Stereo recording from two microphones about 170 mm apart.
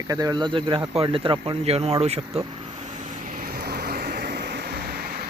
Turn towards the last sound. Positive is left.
turn(degrees=-65)  # may be behind; listen again after turning